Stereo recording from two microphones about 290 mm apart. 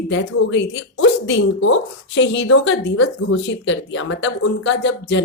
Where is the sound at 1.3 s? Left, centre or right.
Left.